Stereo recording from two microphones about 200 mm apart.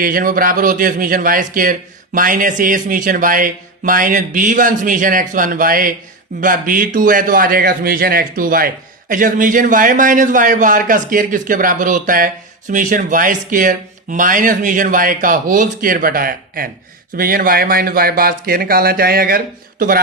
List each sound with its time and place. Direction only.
0.0 s a man's voice: 45° right (ahead or behind)